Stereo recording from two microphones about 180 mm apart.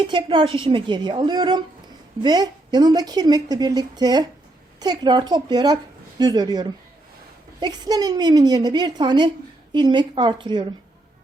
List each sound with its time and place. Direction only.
0.0 s speech: 30° right (ahead or behind)